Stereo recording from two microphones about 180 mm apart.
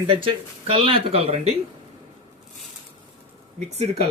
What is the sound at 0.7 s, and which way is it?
Speech, 30° right (ahead or behind).